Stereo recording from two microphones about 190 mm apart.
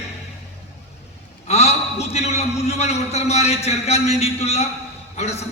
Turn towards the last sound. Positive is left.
turn(degrees=35)  # may be behind; listen again after turning